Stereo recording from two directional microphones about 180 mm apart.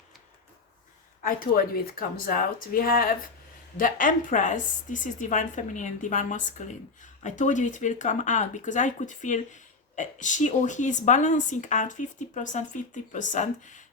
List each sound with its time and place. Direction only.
1.2 s a woman's voice: 50° left (ahead or behind)